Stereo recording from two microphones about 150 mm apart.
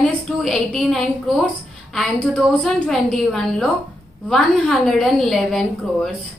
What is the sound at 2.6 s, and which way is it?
A woman's voice, 5° left (ahead or behind).